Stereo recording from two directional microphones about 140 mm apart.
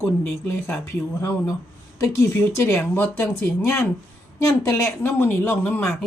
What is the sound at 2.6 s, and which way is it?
A woman's voice, 15° left (ahead or behind).